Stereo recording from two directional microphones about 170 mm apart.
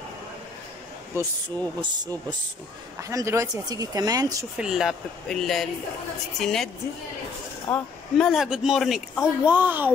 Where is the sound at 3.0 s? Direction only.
20° right (ahead or behind).